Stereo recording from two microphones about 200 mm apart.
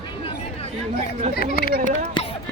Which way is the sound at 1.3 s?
50° left (ahead or behind).